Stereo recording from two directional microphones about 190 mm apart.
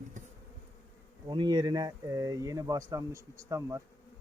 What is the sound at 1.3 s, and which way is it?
Speech, 25° right (ahead or behind).